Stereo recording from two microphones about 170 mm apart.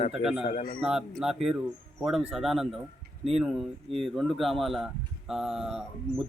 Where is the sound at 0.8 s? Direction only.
5° right (ahead or behind).